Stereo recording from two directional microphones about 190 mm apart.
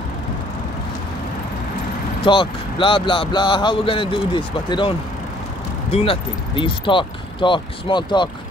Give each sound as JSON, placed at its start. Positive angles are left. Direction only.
{"t": 2.2, "sound": "speech", "side_deg": 25}